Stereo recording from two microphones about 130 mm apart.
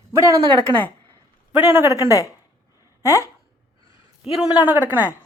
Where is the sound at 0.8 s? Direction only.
15° left (ahead or behind).